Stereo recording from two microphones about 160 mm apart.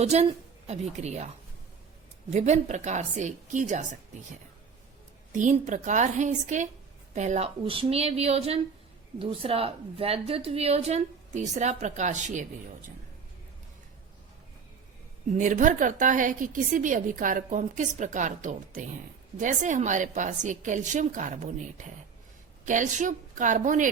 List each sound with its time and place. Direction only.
0.0 s a woman's voice: 40° right (ahead or behind)
2.3 s a woman's voice: 45° right (ahead or behind)
5.3 s a woman's voice: 50° right (ahead or behind)
15.3 s a woman's voice: 50° right (ahead or behind)